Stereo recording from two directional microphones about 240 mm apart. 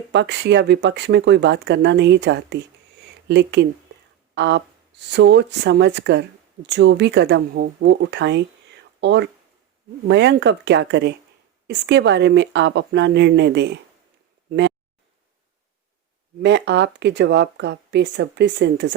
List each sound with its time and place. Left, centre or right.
0.1 s speech: right
16.4 s speech: right